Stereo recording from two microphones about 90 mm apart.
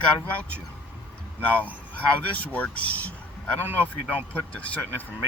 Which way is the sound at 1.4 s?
15° left (ahead or behind).